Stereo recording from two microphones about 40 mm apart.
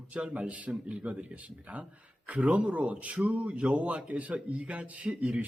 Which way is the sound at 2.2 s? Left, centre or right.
Right.